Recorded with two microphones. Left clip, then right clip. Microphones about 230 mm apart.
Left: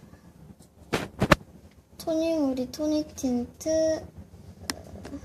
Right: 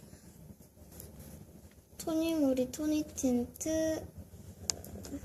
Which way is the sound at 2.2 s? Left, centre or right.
Centre.